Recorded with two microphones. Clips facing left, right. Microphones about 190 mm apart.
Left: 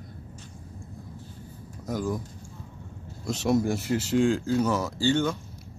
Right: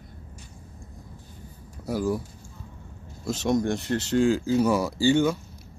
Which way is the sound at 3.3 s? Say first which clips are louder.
Even; centre (ahead or behind).